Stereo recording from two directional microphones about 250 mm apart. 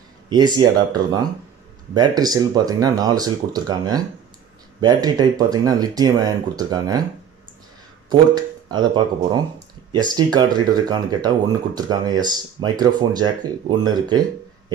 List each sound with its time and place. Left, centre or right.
0.3 s speech: centre
8.1 s speech: centre